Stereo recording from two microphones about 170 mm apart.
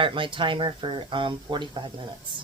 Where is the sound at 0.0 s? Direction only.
30° right (ahead or behind).